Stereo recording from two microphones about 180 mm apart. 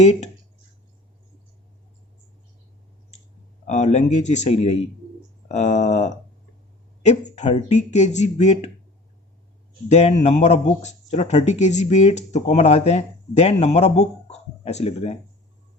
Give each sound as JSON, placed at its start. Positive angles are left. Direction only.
{"t": 0.0, "sound": "speech", "side_deg": 40}
{"t": 3.7, "sound": "speech", "side_deg": 40}
{"t": 9.9, "sound": "speech", "side_deg": 40}